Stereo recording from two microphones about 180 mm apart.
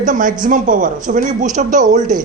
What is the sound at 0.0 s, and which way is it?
Speech, 45° right (ahead or behind).